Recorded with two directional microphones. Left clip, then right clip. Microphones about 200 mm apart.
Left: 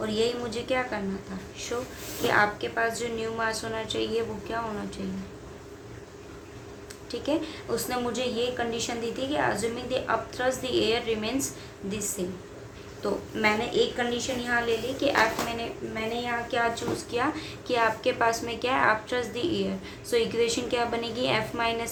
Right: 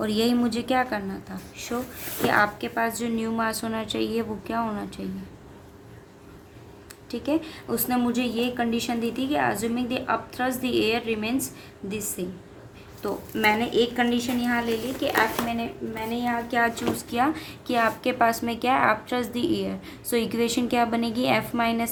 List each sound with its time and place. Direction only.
0.0 s a woman's voice: 45° right (ahead or behind)
7.1 s a woman's voice: 40° right (ahead or behind)